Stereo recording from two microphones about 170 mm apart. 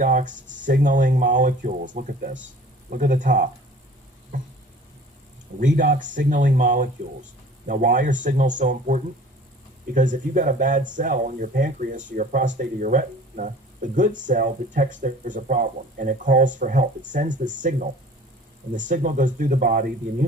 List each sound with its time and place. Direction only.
0.0 s speech: 50° right (ahead or behind)
5.5 s speech: 50° right (ahead or behind)